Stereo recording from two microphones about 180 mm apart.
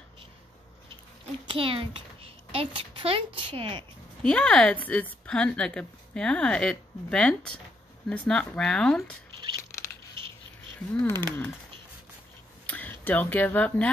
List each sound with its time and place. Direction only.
1.5 s a child's voice: 30° right (ahead or behind)
4.2 s a woman's voice: 5° left (ahead or behind)
11.1 s speech: 15° left (ahead or behind)
12.6 s speech: 10° left (ahead or behind)